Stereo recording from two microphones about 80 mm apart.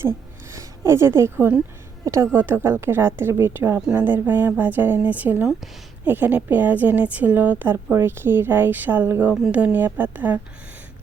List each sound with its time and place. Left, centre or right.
0.5 s a woman's voice: right
2.3 s a woman's voice: right